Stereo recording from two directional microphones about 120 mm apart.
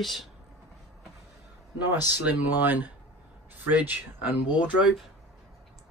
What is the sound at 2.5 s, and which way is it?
Speech, 15° right (ahead or behind).